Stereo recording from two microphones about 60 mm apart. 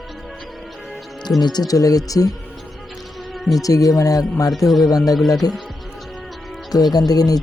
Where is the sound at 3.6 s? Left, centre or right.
Left.